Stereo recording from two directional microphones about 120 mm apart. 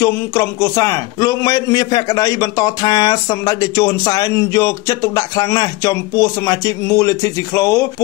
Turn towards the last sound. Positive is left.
turn(degrees=25)  # may be behind; listen again after turning